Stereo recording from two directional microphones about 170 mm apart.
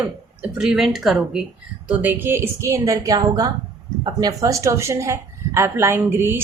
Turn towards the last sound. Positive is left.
turn(degrees=-15)  # may be behind; listen again after turning